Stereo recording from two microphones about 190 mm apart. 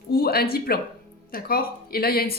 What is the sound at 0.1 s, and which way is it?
Speech, 55° left (ahead or behind).